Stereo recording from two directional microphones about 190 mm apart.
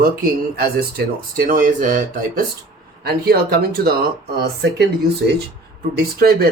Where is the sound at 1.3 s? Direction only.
45° right (ahead or behind).